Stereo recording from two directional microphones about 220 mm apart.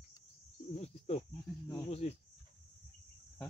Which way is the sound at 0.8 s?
30° left (ahead or behind).